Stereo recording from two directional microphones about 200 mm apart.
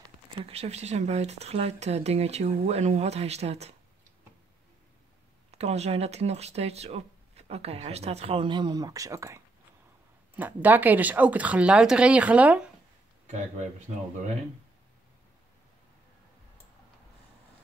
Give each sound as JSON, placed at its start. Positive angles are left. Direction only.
{"t": 0.5, "sound": "speech", "side_deg": -30}
{"t": 5.5, "sound": "a woman's voice", "side_deg": -30}